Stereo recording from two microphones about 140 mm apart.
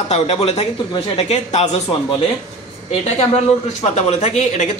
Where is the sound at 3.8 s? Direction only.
50° left (ahead or behind).